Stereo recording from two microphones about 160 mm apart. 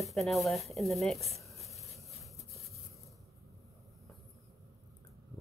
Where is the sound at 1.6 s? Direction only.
Centre (ahead or behind).